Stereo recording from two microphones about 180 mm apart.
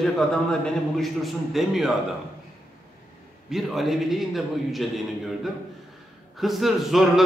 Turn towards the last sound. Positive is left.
turn(degrees=0)  # may be behind; listen again after turning